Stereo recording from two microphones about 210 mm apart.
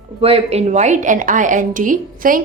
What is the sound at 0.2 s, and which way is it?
A woman's voice, 25° right (ahead or behind).